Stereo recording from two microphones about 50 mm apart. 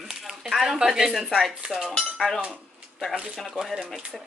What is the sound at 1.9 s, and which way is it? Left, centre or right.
Cutlery, centre.